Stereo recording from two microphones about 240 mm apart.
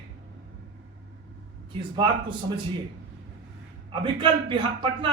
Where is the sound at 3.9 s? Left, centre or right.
Centre.